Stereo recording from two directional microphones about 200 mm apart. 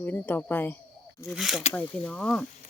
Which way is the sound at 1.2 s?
Centre (ahead or behind).